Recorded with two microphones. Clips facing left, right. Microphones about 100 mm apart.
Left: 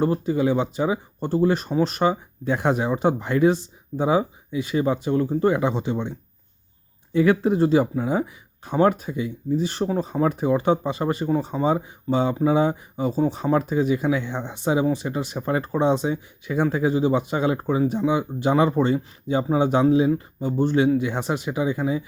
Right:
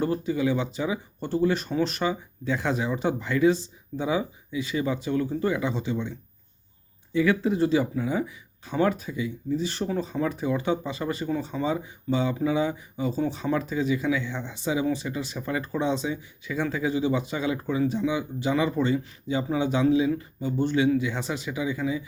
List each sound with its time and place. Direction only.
0.0 s speech: 40° left (ahead or behind)
5.1 s speech: 35° left (ahead or behind)
5.5 s speech: 50° left (ahead or behind)
12.3 s speech: 35° left (ahead or behind)
12.5 s speech: 45° left (ahead or behind)